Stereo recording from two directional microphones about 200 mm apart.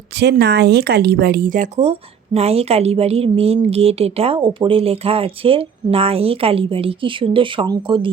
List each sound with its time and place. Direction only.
0.1 s speech: 55° right (ahead or behind); by 8.1 s 25° right (ahead or behind)